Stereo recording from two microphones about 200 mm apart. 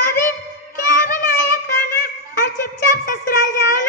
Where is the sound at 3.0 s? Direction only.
40° left (ahead or behind).